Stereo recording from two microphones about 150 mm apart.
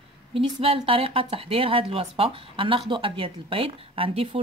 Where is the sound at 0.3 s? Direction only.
40° right (ahead or behind).